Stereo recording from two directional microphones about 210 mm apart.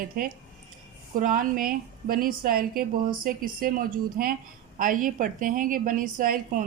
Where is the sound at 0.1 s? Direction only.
40° right (ahead or behind).